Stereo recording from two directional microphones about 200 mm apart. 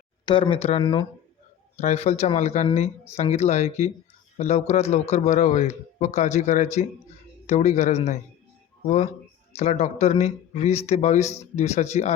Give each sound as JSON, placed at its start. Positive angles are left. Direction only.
{"t": 0.3, "sound": "speech", "side_deg": 25}
{"t": 1.7, "sound": "speech", "side_deg": 35}
{"t": 9.6, "sound": "speech", "side_deg": 35}